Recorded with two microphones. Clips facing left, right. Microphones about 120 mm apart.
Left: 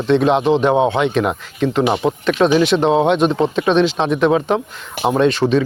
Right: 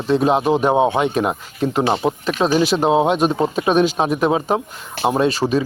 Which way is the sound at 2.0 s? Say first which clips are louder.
Left 3 dB; 20° right (ahead or behind).